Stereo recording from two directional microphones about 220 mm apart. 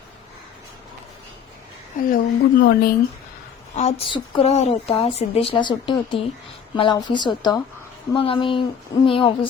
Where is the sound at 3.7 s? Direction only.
30° left (ahead or behind).